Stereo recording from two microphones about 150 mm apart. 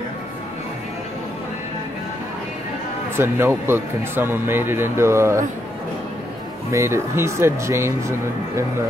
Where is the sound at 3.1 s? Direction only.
15° right (ahead or behind).